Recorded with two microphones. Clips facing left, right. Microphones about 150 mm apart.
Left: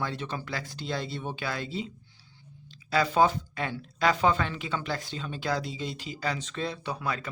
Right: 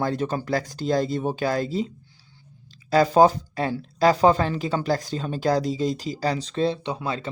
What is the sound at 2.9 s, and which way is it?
Speech, 40° right (ahead or behind).